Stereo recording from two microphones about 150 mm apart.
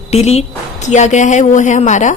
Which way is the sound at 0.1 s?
45° left (ahead or behind).